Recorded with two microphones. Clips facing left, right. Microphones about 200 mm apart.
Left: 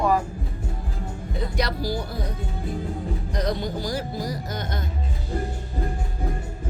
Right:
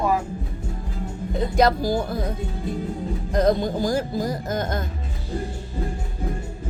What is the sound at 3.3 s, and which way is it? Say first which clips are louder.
Music: right 8 dB; 50° right (ahead or behind).